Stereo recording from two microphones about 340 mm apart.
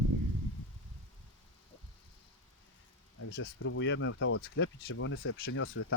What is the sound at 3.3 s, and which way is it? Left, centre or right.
Speech, left.